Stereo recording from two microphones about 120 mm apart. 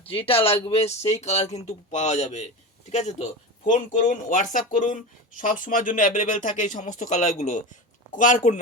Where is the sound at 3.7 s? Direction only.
90° left.